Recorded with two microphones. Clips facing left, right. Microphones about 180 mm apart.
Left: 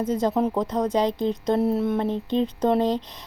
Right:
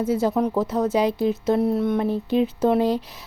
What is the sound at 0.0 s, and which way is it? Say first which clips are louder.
Speech: right 1 dB; 10° right (ahead or behind).